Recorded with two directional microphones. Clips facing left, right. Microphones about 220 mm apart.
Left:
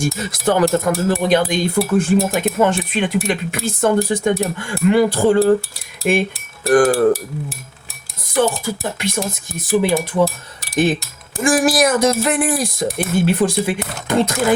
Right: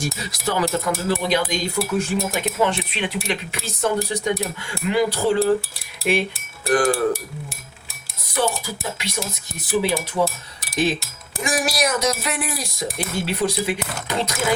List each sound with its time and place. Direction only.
0.0 s speech: 50° left (ahead or behind)
8.4 s speech: 50° left (ahead or behind)
11.4 s speech: 50° left (ahead or behind)